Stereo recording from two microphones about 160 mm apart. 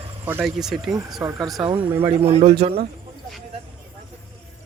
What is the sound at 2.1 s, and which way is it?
Speech, 40° right (ahead or behind).